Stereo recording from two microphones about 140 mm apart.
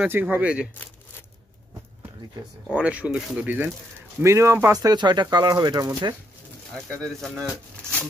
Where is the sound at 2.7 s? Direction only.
10° right (ahead or behind); by 6.1 s 30° right (ahead or behind).